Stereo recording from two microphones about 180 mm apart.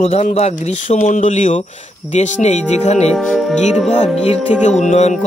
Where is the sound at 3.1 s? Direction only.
Centre (ahead or behind).